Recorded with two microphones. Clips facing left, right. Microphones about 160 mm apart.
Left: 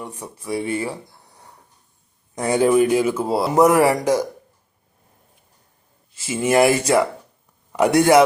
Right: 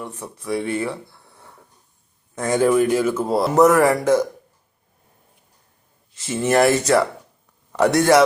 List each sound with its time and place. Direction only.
0.0 s speech: 10° left (ahead or behind)
2.3 s speech: 15° left (ahead or behind)
6.1 s speech: 10° left (ahead or behind)